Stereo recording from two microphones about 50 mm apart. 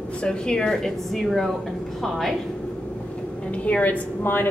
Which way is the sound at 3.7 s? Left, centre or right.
Left.